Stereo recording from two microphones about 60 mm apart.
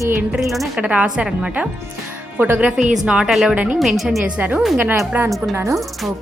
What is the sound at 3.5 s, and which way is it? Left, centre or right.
Speech, centre.